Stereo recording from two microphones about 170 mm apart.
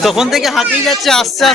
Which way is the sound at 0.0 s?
Centre (ahead or behind).